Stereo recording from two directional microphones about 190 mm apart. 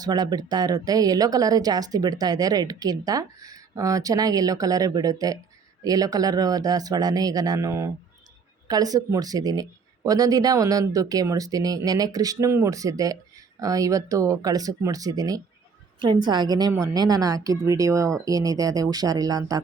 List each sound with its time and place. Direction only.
0.0 s speech: 20° right (ahead or behind)